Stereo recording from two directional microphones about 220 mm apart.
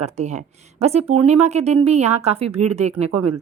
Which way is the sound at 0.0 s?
30° right (ahead or behind).